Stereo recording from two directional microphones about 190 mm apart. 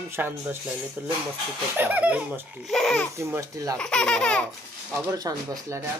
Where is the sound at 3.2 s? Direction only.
15° right (ahead or behind).